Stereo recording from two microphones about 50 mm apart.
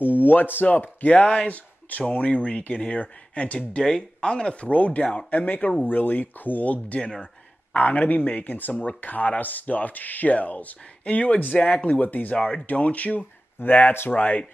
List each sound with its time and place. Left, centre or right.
0.2 s speech: left
0.8 s speech: left